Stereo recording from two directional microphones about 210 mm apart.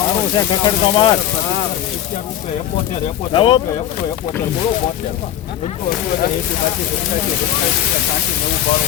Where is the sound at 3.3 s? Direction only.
25° left (ahead or behind).